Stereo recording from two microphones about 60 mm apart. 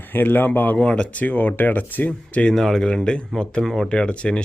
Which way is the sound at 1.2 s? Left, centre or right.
Left.